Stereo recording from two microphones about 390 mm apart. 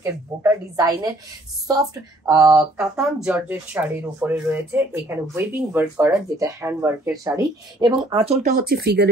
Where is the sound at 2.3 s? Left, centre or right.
Centre.